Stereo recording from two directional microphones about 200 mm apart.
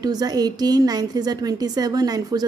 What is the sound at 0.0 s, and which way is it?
A woman's voice, 20° right (ahead or behind).